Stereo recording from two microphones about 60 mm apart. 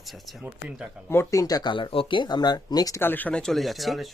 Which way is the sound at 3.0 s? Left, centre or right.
Left.